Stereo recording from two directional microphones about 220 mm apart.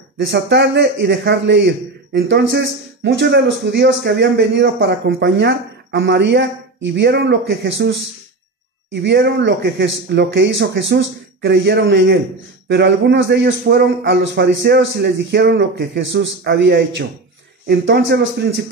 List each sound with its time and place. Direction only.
0.3 s a man's voice: 55° right (ahead or behind)
8.9 s a man's voice: 50° right (ahead or behind)